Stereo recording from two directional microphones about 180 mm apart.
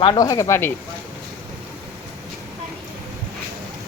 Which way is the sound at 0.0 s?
25° left (ahead or behind).